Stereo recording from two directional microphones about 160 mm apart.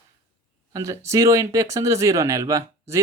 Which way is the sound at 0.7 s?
20° right (ahead or behind).